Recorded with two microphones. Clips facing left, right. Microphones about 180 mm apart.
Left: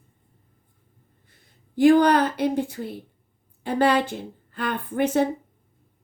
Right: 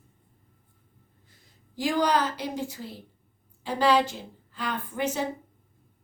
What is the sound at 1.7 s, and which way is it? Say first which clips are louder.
Speech: left 9 dB; 55° left (ahead or behind).